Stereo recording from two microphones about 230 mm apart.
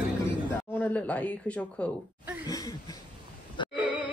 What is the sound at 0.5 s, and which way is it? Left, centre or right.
Speech, centre.